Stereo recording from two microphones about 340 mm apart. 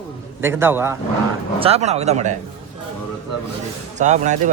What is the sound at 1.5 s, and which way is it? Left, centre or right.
Speech, centre.